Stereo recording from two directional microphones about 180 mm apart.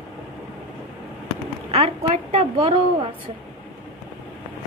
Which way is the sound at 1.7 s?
35° right (ahead or behind).